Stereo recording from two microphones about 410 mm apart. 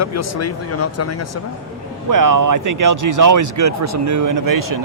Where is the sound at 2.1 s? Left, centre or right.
Right.